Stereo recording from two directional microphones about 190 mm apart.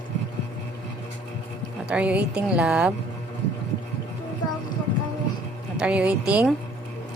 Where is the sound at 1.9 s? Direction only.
5° right (ahead or behind).